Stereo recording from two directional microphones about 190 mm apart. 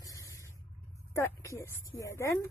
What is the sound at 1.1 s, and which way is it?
Speech, 15° left (ahead or behind).